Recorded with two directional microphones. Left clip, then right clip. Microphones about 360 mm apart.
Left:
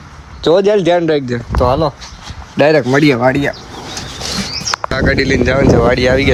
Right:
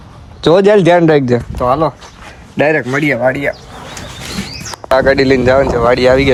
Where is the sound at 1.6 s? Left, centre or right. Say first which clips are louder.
Left 3 dB; centre.